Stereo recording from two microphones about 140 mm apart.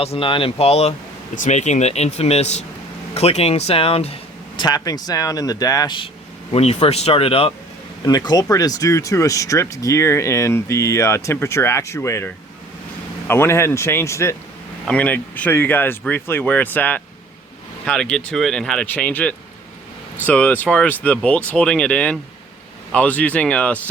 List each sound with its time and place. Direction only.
0.0 s speech: 40° left (ahead or behind)
4.6 s speech: 25° left (ahead or behind)
6.5 s speech: 50° left (ahead or behind)
8.0 s speech: 30° left (ahead or behind); by 23.7 s 10° left (ahead or behind)